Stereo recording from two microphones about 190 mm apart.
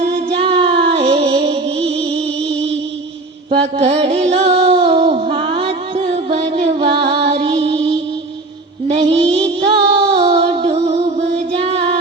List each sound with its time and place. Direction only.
0.0 s music: 30° right (ahead or behind)
3.5 s music: 30° right (ahead or behind)